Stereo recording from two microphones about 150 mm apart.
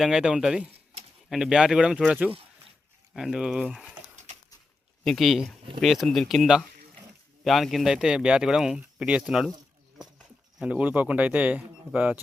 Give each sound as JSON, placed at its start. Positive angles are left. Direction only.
{"t": 0.0, "sound": "speech", "side_deg": -5}
{"t": 5.0, "sound": "speech", "side_deg": 0}
{"t": 10.6, "sound": "speech", "side_deg": -10}